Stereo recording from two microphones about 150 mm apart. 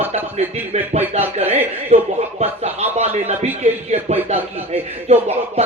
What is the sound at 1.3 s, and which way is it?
Speech, 45° right (ahead or behind).